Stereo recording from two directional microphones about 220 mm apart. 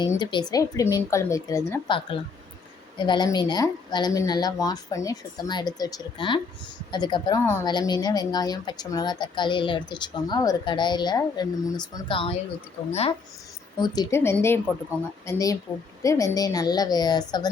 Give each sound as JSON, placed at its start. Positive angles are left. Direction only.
{"t": 0.0, "sound": "a woman's voice", "side_deg": 20}